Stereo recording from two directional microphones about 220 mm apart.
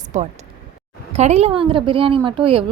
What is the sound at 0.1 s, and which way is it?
A woman's voice, 35° right (ahead or behind).